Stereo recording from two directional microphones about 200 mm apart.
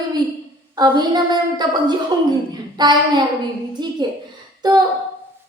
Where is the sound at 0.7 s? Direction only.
20° right (ahead or behind).